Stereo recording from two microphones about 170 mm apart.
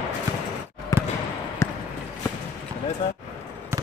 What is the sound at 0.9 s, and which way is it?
Basketball bounce, 20° left (ahead or behind).